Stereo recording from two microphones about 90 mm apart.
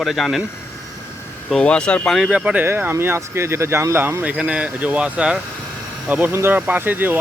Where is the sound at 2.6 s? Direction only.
25° right (ahead or behind).